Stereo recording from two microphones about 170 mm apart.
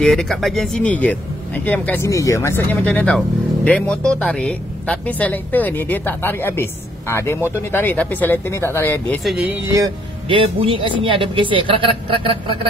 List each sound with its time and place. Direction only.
0.0 s a woman's voice: 5° left (ahead or behind)
9.2 s speech: centre (ahead or behind)
9.8 s speech: 30° right (ahead or behind)